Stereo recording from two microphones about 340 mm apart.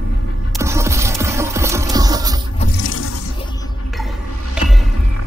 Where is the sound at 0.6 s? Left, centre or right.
Centre.